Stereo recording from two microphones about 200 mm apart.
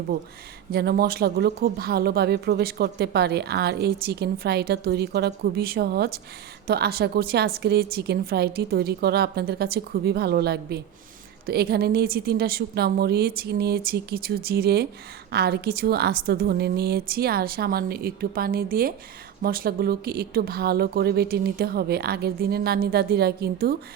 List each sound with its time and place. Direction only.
0.7 s a woman's voice: 50° right (ahead or behind)